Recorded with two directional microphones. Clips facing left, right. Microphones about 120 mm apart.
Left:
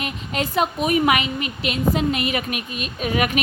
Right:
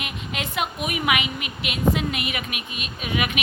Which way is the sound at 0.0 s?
35° left (ahead or behind).